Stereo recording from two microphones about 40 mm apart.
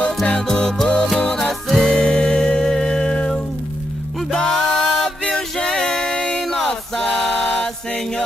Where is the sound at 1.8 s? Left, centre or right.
Left.